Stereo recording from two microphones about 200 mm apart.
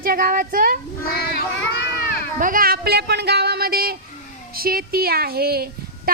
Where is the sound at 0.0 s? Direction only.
45° right (ahead or behind).